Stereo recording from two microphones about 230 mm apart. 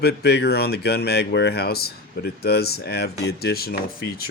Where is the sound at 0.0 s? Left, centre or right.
Left.